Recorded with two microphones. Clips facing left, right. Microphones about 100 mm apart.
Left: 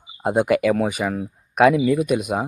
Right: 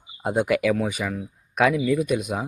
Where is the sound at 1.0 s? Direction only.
45° left (ahead or behind).